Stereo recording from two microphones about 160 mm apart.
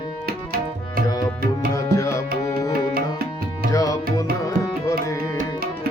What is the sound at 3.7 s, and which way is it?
Tabla, 20° left (ahead or behind).